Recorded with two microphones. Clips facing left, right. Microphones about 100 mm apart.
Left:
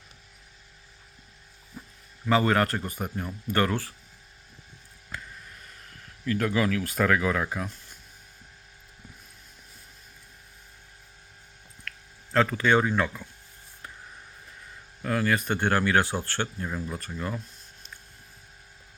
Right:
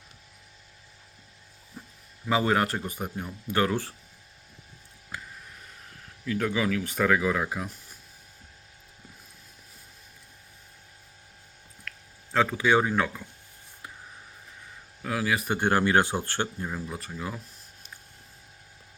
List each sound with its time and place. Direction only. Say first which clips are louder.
2.3 s speech: left 2 dB; 5° right (ahead or behind)
5.1 s a sound: even; 10° right (ahead or behind)
6.2 s speech: left 2 dB; 5° right (ahead or behind)
12.3 s speech: even; 5° right (ahead or behind)
15.0 s speech: left 2 dB; 5° right (ahead or behind)